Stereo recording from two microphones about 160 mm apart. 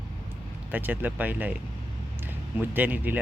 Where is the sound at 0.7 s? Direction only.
10° right (ahead or behind).